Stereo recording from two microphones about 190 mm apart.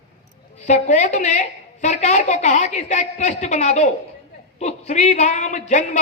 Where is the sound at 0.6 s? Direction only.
40° left (ahead or behind).